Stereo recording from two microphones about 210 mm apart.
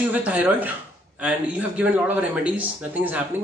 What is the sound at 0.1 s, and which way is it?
Speech, 5° right (ahead or behind).